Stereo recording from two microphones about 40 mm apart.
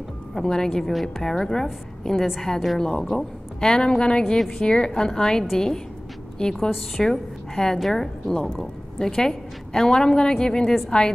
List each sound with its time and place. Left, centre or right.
0.3 s a woman's voice: centre
2.2 s a woman's voice: centre
2.8 s a woman's voice: centre
4.5 s a woman's voice: left
7.0 s a woman's voice: centre